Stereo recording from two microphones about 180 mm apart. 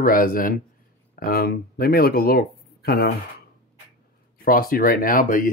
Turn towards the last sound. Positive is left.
turn(degrees=50)  # may be behind; listen again after turning